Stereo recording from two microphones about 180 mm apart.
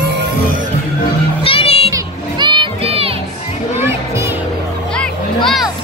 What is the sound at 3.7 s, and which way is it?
Music, 15° right (ahead or behind).